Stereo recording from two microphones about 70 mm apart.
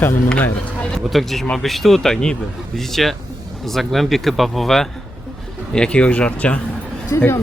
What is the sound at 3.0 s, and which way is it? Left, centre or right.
Speech, centre.